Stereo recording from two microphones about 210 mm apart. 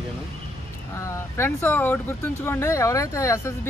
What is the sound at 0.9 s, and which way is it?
Speech, 15° left (ahead or behind).